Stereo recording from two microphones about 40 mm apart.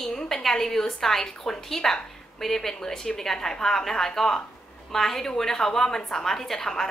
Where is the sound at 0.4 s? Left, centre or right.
Centre.